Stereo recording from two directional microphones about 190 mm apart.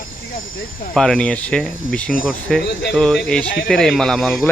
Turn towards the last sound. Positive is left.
turn(degrees=0)  # may be behind; listen again after turning